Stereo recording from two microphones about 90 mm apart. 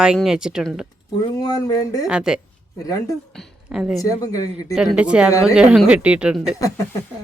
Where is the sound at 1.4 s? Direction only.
45° left (ahead or behind).